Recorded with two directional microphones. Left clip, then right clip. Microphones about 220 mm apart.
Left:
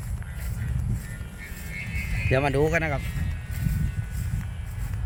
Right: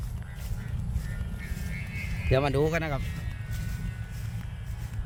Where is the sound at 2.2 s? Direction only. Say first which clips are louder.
Left 2 dB; centre (ahead or behind).